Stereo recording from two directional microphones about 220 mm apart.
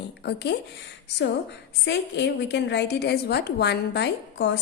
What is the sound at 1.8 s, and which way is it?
A woman's voice, 50° left (ahead or behind).